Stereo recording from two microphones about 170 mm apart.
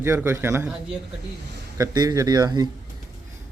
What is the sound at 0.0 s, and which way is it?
Speech, 15° right (ahead or behind).